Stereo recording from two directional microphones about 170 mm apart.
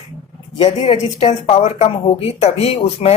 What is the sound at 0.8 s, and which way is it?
Speech, 40° left (ahead or behind).